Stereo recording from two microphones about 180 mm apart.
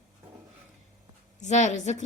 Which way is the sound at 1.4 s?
40° left (ahead or behind).